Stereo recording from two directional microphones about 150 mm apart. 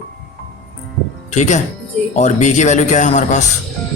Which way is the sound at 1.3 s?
50° left (ahead or behind).